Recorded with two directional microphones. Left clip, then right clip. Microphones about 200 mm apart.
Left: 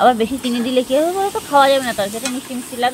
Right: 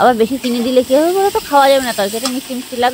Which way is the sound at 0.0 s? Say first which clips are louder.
Right 2 dB; 40° right (ahead or behind).